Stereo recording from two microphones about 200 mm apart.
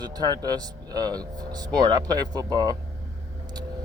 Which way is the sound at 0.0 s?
20° right (ahead or behind).